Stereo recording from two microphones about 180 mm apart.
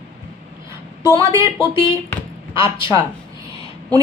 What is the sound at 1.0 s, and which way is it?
Speech, 15° right (ahead or behind).